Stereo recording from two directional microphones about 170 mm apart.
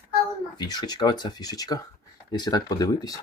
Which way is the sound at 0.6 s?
25° left (ahead or behind).